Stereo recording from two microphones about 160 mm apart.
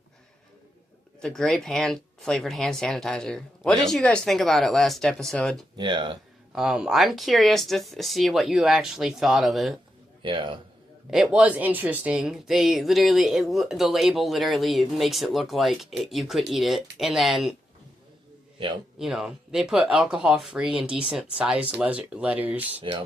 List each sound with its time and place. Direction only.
1.2 s speech: 5° left (ahead or behind)
5.7 s speech: 30° right (ahead or behind)
6.5 s speech: 5° right (ahead or behind)
10.2 s a man's voice: 30° right (ahead or behind)
11.1 s speech: 5° right (ahead or behind)
18.9 s speech: 5° right (ahead or behind)
22.8 s a man's voice: 30° right (ahead or behind)